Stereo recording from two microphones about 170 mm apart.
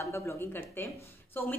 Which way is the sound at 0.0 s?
15° left (ahead or behind).